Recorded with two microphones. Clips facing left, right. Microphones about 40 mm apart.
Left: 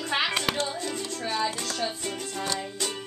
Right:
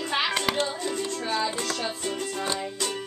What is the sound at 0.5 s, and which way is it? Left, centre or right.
Music, right.